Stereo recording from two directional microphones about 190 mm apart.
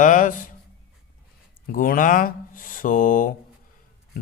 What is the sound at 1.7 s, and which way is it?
Speech, 45° left (ahead or behind).